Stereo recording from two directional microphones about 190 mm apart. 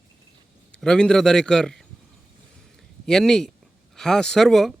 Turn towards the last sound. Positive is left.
turn(degrees=0)  # may be behind; listen again after turning